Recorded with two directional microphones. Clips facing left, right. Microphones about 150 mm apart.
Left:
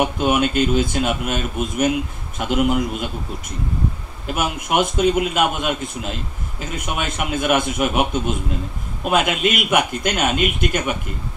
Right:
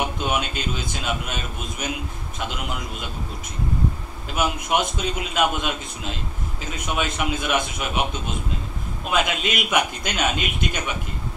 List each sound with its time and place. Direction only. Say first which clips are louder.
0.2 s a man's voice: left 8 dB; 55° left (ahead or behind)
4.3 s a man's voice: left 2 dB; 55° left (ahead or behind)